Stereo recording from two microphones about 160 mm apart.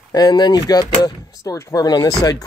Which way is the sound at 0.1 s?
25° left (ahead or behind).